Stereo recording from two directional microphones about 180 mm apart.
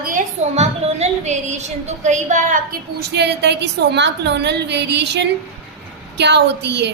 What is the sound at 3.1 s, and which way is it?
A woman's voice, 70° right (ahead or behind).